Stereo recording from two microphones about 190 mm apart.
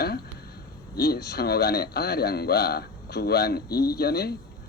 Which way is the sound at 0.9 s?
60° left (ahead or behind).